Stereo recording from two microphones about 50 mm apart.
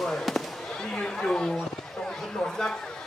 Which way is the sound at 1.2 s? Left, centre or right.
Centre.